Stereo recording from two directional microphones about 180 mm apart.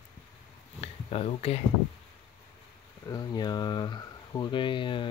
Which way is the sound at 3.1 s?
20° left (ahead or behind).